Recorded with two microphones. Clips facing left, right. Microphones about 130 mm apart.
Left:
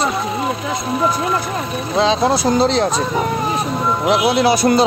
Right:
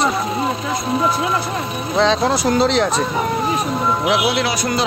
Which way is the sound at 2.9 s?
Centre (ahead or behind).